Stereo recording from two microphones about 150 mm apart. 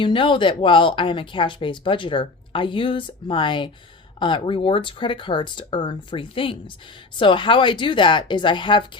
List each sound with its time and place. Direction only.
0.0 s speech: 35° left (ahead or behind)